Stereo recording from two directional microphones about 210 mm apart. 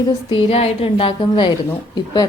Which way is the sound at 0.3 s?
25° left (ahead or behind).